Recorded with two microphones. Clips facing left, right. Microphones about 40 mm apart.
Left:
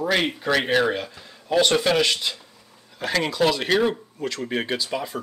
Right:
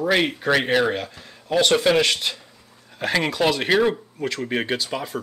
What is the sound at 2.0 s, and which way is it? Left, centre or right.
Speech, right.